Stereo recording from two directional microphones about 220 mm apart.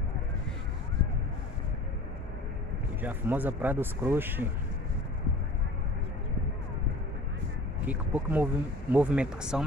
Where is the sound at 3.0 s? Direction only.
10° right (ahead or behind).